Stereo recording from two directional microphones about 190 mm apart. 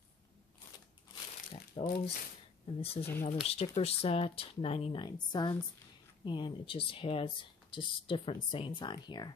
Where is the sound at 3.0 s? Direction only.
40° left (ahead or behind); by 9.3 s 25° left (ahead or behind).